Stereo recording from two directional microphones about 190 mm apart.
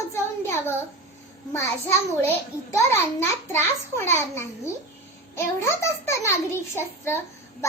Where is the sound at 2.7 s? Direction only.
15° left (ahead or behind).